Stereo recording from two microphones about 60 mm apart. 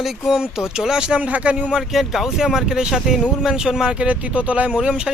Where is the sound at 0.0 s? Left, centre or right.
Centre.